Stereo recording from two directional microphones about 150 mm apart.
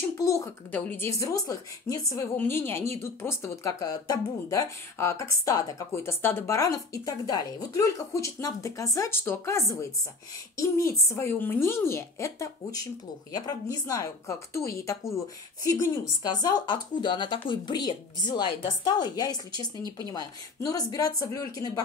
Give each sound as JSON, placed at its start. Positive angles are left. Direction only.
{"t": 0.2, "sound": "speech", "side_deg": 20}